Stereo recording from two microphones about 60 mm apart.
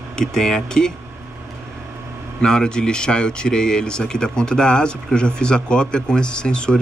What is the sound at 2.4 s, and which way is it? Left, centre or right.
Speech, centre.